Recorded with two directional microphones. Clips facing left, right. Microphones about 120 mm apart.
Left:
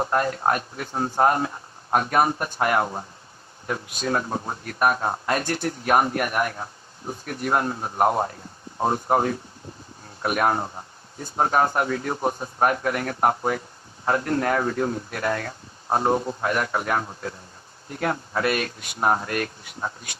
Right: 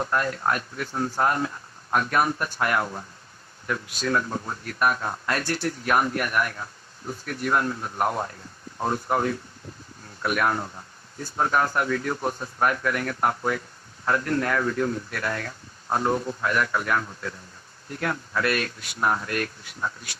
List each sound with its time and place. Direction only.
0.0 s speech: 30° left (ahead or behind)